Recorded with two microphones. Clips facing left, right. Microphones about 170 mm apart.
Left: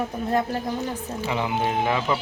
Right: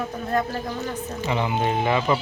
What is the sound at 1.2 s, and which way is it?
Speech, 5° left (ahead or behind).